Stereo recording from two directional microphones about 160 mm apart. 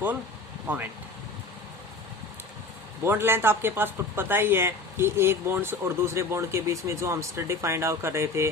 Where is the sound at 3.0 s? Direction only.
15° right (ahead or behind).